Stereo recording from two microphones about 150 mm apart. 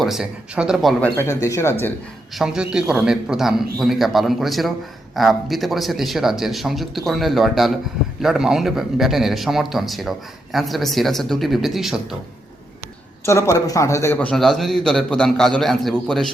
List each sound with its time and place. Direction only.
0.0 s a man's voice: 5° right (ahead or behind)
1.1 s speech: 15° left (ahead or behind)
2.3 s a man's voice: 5° right (ahead or behind)
13.2 s a man's voice: 20° left (ahead or behind); by 16.2 s centre (ahead or behind)